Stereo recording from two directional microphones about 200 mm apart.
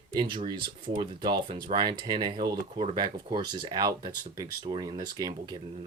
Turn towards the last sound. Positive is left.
turn(degrees=-20)  # may be behind; listen again after turning